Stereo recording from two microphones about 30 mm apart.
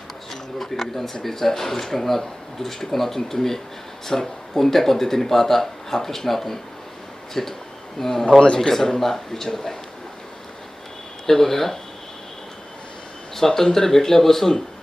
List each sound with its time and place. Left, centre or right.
0.6 s speech: centre
11.3 s speech: centre
13.3 s speech: centre